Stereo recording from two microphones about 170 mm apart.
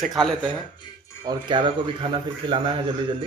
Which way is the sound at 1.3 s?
30° right (ahead or behind).